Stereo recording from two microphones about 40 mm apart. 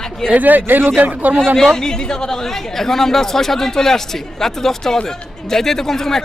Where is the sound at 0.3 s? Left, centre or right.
Right.